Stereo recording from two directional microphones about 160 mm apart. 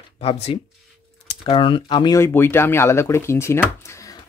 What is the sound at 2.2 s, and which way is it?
Speech, 15° left (ahead or behind).